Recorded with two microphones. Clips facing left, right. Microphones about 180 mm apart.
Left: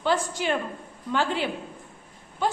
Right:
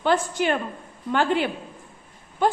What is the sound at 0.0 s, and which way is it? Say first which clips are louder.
A woman's voice: right 3 dB; 55° right (ahead or behind).